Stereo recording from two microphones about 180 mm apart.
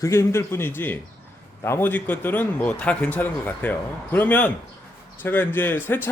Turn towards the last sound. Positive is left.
turn(degrees=10)  # may be behind; listen again after turning